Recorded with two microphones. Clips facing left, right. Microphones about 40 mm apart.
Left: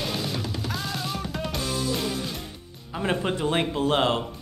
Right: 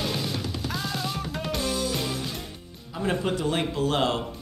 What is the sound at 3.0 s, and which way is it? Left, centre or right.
A man's voice, left.